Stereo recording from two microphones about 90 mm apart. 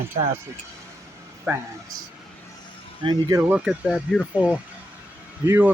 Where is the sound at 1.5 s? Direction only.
20° right (ahead or behind).